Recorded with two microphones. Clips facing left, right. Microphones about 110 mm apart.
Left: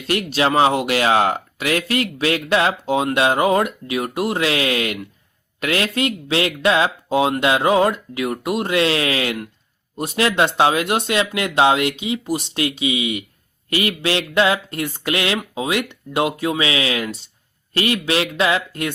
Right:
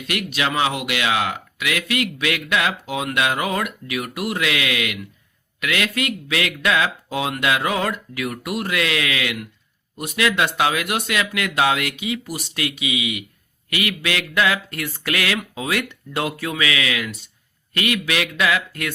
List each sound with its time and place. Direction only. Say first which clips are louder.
0.0 s speech: left 5 dB; 30° left (ahead or behind)